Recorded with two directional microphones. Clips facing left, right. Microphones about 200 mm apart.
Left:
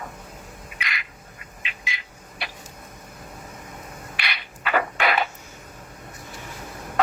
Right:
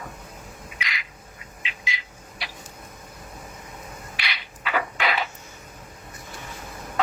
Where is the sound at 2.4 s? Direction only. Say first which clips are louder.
Left 3 dB; 55° left (ahead or behind).